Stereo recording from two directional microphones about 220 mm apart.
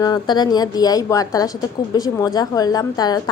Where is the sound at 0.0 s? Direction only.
20° left (ahead or behind).